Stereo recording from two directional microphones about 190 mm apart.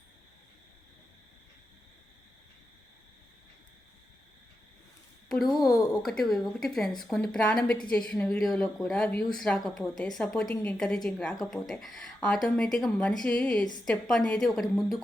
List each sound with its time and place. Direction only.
5.3 s a woman's voice: centre (ahead or behind)